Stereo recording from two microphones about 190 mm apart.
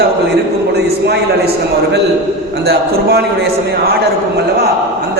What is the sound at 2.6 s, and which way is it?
A man's voice, 55° right (ahead or behind).